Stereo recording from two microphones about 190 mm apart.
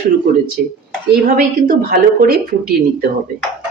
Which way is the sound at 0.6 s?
50° right (ahead or behind).